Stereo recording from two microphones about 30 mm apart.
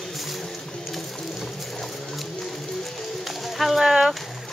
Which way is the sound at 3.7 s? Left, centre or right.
Centre.